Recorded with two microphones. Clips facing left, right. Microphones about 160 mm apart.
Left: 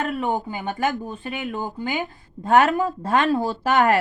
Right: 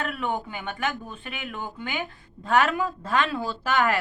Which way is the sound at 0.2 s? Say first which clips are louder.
Left 5 dB; 40° left (ahead or behind).